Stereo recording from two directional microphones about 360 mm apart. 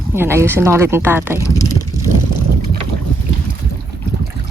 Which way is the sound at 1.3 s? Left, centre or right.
Centre.